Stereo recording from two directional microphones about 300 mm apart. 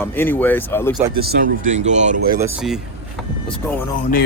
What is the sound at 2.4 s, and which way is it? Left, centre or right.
Speech, centre.